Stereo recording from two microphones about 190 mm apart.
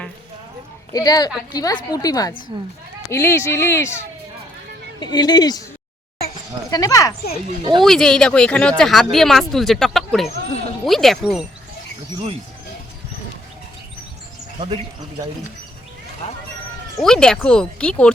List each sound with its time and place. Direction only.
0.9 s a woman's voice: 20° left (ahead or behind)
6.7 s a woman's voice: 20° left (ahead or behind)
7.8 s speech: 5° left (ahead or behind)
17.0 s speech: 5° left (ahead or behind)